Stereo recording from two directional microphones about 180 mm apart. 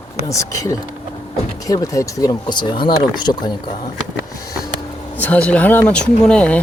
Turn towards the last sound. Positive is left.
turn(degrees=5)  # may be behind; listen again after turning